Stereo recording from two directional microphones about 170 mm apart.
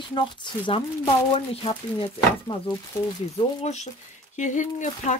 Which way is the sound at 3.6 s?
40° left (ahead or behind).